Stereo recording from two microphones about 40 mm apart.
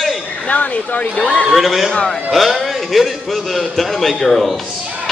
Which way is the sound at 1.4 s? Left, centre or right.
Centre.